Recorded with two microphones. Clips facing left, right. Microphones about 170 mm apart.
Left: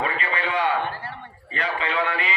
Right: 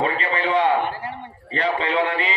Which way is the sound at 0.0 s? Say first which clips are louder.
Right 4 dB; 35° right (ahead or behind).